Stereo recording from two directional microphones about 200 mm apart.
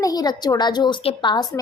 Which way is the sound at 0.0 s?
20° left (ahead or behind).